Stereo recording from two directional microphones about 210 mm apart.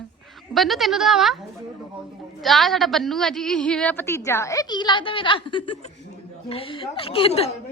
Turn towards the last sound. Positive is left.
turn(degrees=30)  # may be behind; listen again after turning